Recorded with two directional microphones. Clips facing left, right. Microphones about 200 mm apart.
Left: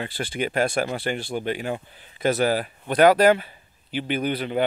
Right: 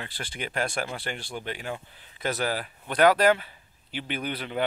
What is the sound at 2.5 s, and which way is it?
Speech, 40° left (ahead or behind).